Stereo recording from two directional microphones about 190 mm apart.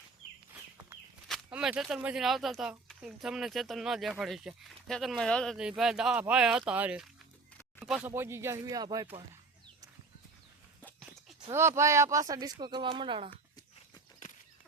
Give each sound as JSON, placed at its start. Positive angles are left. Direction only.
{"t": 1.3, "sound": "speech", "side_deg": -5}
{"t": 11.5, "sound": "speech", "side_deg": -15}